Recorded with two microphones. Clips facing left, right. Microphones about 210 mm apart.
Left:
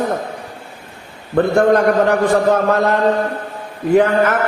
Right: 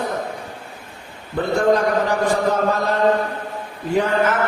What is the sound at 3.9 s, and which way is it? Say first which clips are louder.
Speech: left 5 dB; 60° left (ahead or behind).